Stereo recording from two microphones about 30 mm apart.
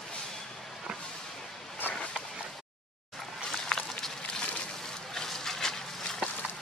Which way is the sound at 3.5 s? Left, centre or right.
Centre.